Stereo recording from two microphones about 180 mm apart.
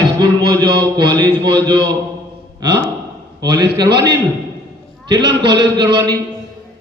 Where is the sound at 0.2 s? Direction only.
20° right (ahead or behind).